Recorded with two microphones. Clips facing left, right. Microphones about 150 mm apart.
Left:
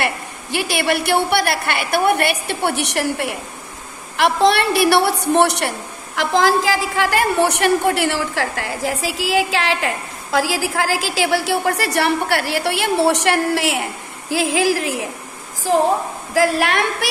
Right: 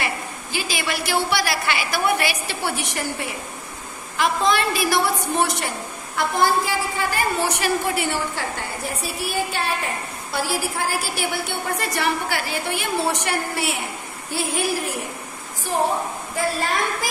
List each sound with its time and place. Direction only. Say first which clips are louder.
0.0 s a woman's voice: left 4 dB; 65° left (ahead or behind)
6.1 s a woman's voice: left 4 dB; 90° left
16.3 s a woman's voice: left 7 dB; 80° left